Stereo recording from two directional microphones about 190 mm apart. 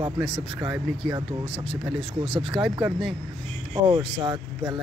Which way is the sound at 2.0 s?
30° right (ahead or behind).